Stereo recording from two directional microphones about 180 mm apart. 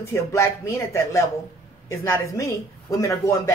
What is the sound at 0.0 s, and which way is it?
Speech, 15° left (ahead or behind).